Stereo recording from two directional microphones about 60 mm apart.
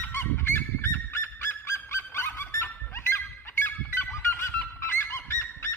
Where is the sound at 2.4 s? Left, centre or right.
Left.